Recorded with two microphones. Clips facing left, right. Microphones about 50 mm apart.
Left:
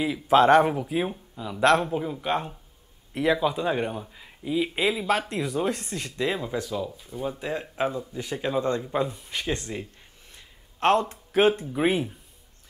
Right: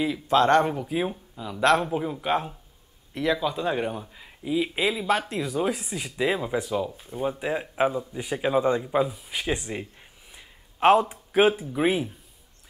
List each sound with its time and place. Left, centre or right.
0.3 s speech: centre
3.1 s speech: centre
7.0 s speech: right
7.2 s speech: centre
10.3 s a sound: centre
11.7 s speech: centre